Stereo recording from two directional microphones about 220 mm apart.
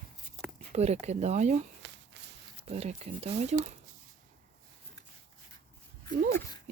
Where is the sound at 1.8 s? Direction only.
55° right (ahead or behind).